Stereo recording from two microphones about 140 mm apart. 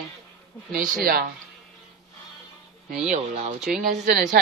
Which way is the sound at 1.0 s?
90° right.